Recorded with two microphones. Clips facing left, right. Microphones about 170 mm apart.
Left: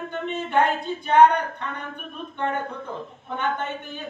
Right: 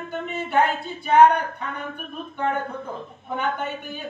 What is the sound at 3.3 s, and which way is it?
Speech, 10° right (ahead or behind).